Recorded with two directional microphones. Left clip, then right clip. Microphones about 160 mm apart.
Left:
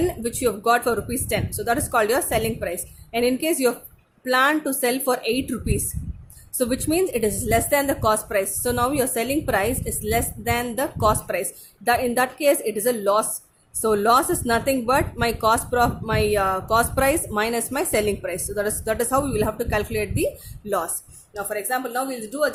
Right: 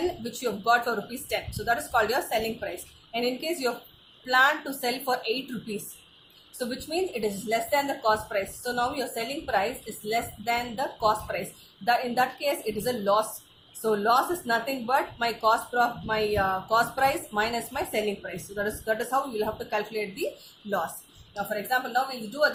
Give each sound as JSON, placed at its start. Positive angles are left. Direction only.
{"t": 0.0, "sound": "a woman's voice", "side_deg": 55}
{"t": 6.6, "sound": "a woman's voice", "side_deg": 60}
{"t": 21.3, "sound": "a woman's voice", "side_deg": 50}